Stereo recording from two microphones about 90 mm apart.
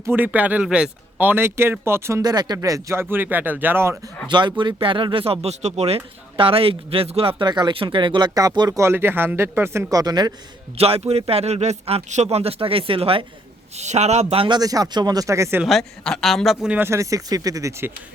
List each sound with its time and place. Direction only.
0.0 s speech: 20° right (ahead or behind)
2.2 s speech: 50° right (ahead or behind); by 3.9 s 25° right (ahead or behind)
4.3 s speech: 60° right (ahead or behind); by 7.4 s 90° right
7.4 s speech: 55° right (ahead or behind)
8.4 s speech: 45° right (ahead or behind)
8.8 s speech: 25° right (ahead or behind)
9.9 s speech: 45° right (ahead or behind)
10.8 s speech: 90° right
14.3 s speech: 60° right (ahead or behind)
14.6 s speech: 45° right (ahead or behind)
15.6 s a man's voice: 5° left (ahead or behind)
16.7 s speech: 25° right (ahead or behind)
17.0 s speech: 40° right (ahead or behind)